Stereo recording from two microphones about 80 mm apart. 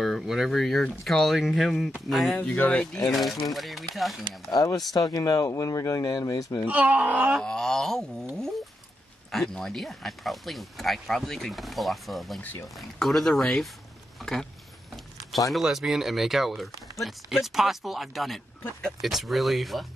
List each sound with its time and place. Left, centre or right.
0.0 s a sound: centre
0.5 s speech: centre
2.3 s speech: centre
3.5 s speech: centre
4.5 s speech: left
6.7 s speech: centre
7.4 s speech: centre
9.3 s speech: centre
15.5 s speech: centre